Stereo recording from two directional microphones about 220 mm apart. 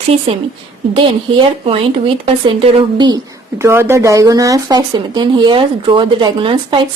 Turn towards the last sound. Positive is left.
turn(degrees=-20)  # may be behind; listen again after turning